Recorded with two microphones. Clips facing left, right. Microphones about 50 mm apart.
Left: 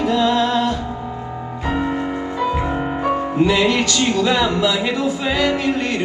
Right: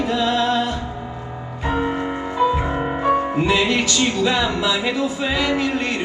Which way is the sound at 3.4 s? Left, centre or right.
Right.